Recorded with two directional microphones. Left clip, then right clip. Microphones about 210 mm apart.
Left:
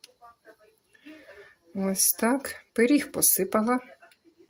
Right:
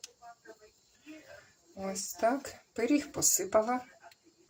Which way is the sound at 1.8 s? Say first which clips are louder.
Left 5 dB; 55° left (ahead or behind).